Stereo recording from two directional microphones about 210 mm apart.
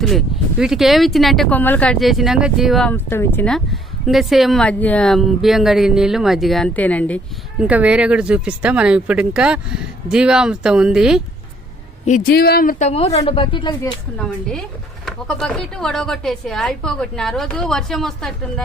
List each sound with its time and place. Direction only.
0.0 s speech: centre (ahead or behind)
2.9 s speech: 10° left (ahead or behind)
7.6 s speech: 5° right (ahead or behind)
12.0 s speech: 40° left (ahead or behind)
12.9 s a woman's voice: 30° left (ahead or behind)
13.8 s speech: 5° left (ahead or behind)